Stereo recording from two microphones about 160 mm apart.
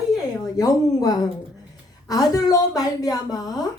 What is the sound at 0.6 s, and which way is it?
A woman's voice, 25° left (ahead or behind).